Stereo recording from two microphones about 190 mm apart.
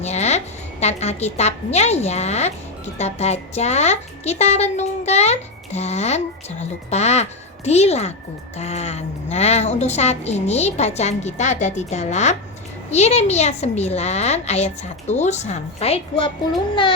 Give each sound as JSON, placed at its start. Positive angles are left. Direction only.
{"t": 0.0, "sound": "a woman's voice", "side_deg": 35}